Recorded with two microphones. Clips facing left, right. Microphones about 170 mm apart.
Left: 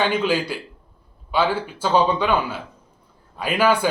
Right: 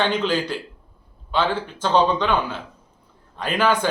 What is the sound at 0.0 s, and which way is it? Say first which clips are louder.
A man's voice: left 1 dB; 10° left (ahead or behind).